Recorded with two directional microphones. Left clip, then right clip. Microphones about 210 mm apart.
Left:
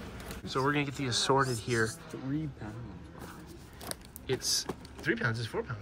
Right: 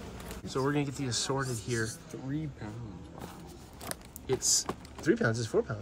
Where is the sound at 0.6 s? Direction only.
10° right (ahead or behind).